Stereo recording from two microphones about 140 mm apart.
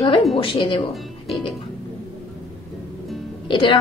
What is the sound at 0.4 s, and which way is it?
A woman's voice, 40° left (ahead or behind).